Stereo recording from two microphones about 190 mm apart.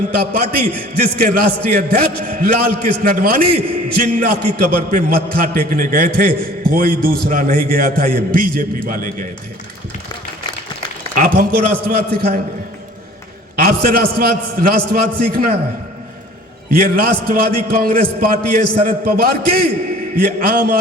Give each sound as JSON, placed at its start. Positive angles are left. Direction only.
{"t": 0.1, "sound": "a man's voice", "side_deg": -50}
{"t": 11.1, "sound": "speech", "side_deg": -45}
{"t": 13.6, "sound": "a man's voice", "side_deg": -50}
{"t": 16.6, "sound": "a man's voice", "side_deg": -50}